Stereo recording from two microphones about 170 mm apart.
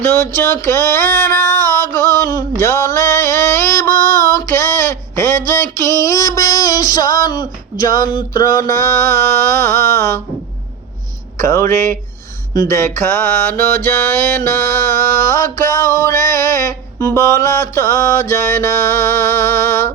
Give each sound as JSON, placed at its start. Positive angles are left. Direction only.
{"t": 0.0, "sound": "mantra", "side_deg": 15}
{"t": 1.6, "sound": "music", "side_deg": 20}
{"t": 8.1, "sound": "mantra", "side_deg": 25}
{"t": 11.3, "sound": "mantra", "side_deg": 15}